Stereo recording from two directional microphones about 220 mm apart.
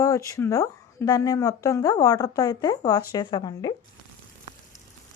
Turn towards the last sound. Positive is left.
turn(degrees=20)  # may be behind; listen again after turning